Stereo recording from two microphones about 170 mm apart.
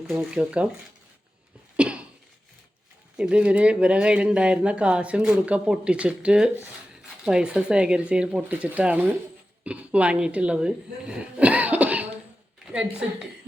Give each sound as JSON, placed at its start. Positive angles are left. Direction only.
{"t": 0.1, "sound": "speech", "side_deg": 0}
{"t": 1.7, "sound": "a sound", "side_deg": -5}
{"t": 3.2, "sound": "speech", "side_deg": -5}